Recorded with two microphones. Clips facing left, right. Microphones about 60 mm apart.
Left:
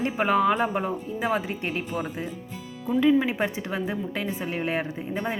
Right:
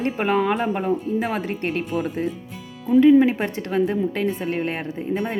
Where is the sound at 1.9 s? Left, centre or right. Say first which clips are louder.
Right 6 dB; centre.